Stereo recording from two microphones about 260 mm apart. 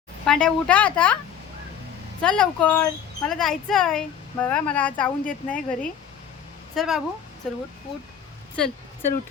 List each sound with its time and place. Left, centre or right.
0.3 s speech: centre
2.2 s speech: centre
8.5 s a sound: centre